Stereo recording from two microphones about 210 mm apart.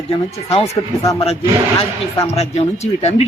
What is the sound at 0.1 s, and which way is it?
Speech, 30° left (ahead or behind).